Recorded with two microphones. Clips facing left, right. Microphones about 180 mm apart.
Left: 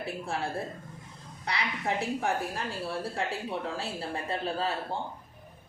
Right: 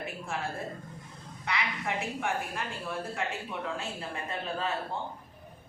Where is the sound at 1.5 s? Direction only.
35° left (ahead or behind).